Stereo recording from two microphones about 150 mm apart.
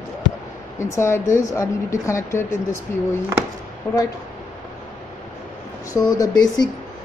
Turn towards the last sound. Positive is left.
turn(degrees=25)  # may be behind; listen again after turning